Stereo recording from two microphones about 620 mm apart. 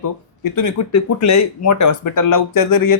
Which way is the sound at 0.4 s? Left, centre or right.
Left.